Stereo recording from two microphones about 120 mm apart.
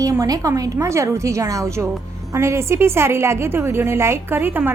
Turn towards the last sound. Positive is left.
turn(degrees=-15)  # may be behind; listen again after turning